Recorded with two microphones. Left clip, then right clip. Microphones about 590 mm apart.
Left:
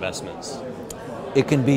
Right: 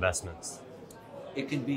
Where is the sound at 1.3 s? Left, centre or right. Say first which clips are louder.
Left 15 dB; left.